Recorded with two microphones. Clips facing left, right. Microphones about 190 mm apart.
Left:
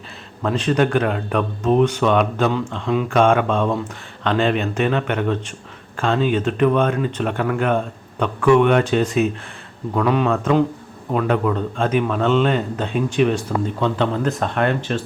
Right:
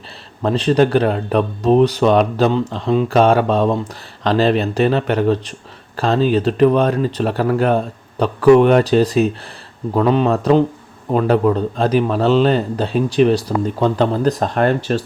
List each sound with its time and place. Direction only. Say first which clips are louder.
0.4 s speech: right 4 dB; 35° right (ahead or behind)